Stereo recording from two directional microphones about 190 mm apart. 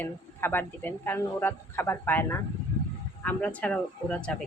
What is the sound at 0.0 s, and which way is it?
Speech, 10° left (ahead or behind).